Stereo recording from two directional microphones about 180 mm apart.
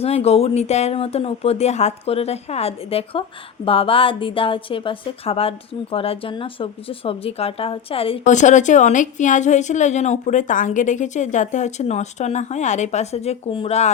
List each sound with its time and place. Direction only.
0.0 s a woman's voice: 35° left (ahead or behind)